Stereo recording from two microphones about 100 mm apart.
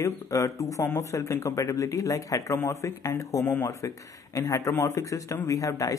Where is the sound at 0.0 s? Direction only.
30° left (ahead or behind).